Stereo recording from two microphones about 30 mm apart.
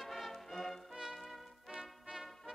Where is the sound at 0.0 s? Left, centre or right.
Centre.